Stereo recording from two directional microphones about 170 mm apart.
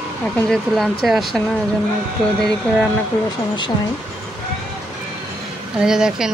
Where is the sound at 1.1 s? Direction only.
Centre (ahead or behind).